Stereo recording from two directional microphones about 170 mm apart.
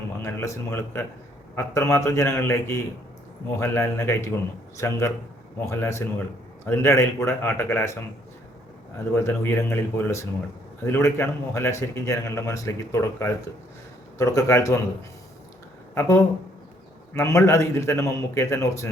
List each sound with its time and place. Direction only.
0.2 s speech: 15° left (ahead or behind)
9.1 s speech: 15° left (ahead or behind)
16.0 s speech: 15° left (ahead or behind)